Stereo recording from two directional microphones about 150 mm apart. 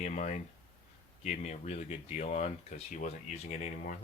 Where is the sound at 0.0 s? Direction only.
55° left (ahead or behind).